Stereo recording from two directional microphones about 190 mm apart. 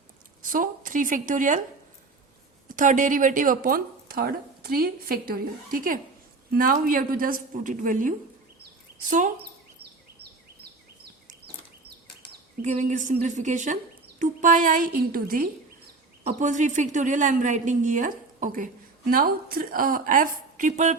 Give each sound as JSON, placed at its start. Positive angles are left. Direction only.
{"t": 0.4, "sound": "speech", "side_deg": -45}
{"t": 2.6, "sound": "speech", "side_deg": -45}
{"t": 12.6, "sound": "speech", "side_deg": -40}